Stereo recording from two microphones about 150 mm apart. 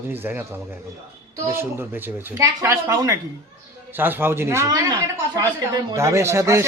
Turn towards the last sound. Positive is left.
turn(degrees=-20)  # may be behind; listen again after turning